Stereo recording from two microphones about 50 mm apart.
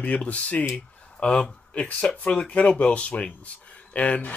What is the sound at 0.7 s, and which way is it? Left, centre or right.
Speech, centre.